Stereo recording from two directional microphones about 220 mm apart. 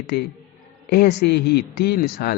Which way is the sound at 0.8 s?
45° left (ahead or behind).